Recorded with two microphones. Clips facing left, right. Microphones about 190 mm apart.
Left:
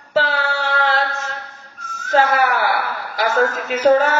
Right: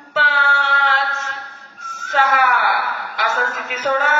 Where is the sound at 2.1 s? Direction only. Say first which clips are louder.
Left 2 dB; 40° left (ahead or behind).